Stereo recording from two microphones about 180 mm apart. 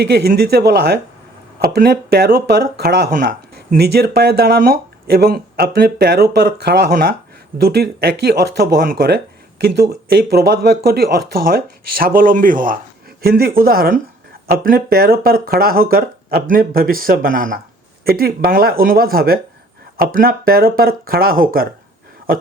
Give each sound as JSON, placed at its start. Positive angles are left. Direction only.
{"t": 0.0, "sound": "speech", "side_deg": -60}